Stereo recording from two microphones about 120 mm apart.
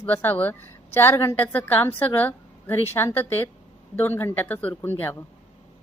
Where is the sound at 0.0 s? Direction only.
15° left (ahead or behind).